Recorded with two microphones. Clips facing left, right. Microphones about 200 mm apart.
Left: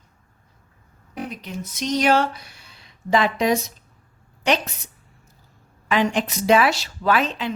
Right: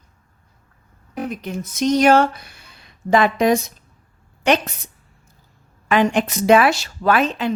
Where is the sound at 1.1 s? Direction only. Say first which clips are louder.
Right 5 dB; 50° right (ahead or behind).